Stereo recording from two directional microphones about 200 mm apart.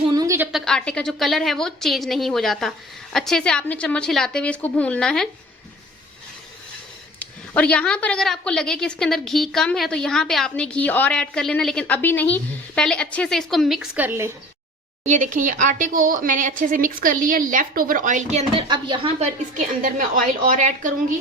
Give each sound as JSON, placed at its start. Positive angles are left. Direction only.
{"t": 0.1, "sound": "a sound", "side_deg": -15}
{"t": 0.5, "sound": "a woman's voice", "side_deg": 5}
{"t": 7.2, "sound": "a woman's voice", "side_deg": 5}
{"t": 15.0, "sound": "a woman's voice", "side_deg": -40}